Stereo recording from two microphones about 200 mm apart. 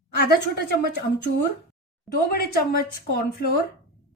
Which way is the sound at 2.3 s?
50° left (ahead or behind).